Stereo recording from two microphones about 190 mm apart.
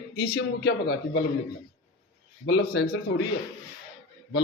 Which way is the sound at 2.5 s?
60° left (ahead or behind).